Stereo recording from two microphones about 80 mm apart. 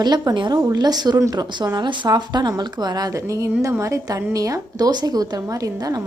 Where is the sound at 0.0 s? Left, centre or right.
Right.